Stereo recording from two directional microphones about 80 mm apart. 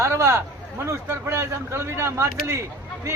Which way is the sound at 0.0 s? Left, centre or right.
Right.